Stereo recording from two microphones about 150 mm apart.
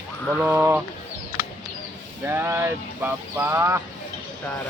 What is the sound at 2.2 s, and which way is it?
Speech, 15° right (ahead or behind).